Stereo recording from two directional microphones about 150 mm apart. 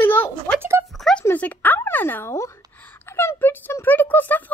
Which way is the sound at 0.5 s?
15° right (ahead or behind).